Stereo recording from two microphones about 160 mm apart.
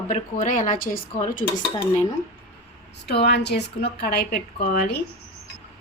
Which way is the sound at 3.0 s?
90° left.